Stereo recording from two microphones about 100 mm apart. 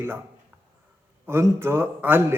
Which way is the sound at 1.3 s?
25° right (ahead or behind).